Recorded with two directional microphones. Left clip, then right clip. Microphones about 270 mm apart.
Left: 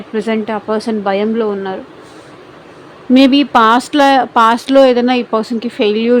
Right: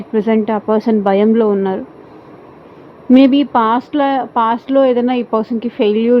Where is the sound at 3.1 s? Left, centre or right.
Centre.